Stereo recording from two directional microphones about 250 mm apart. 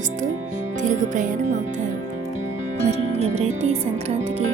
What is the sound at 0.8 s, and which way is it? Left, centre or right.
Music, right.